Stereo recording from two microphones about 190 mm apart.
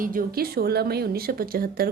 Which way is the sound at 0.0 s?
50° right (ahead or behind).